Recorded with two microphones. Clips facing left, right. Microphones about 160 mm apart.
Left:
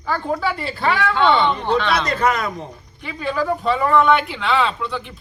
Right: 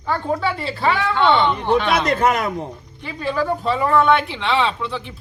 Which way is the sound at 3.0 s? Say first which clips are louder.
Even; centre (ahead or behind).